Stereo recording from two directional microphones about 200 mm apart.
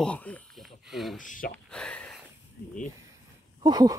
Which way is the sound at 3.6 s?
20° right (ahead or behind).